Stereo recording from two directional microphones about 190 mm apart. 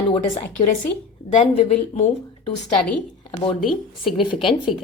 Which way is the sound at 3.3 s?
25° left (ahead or behind).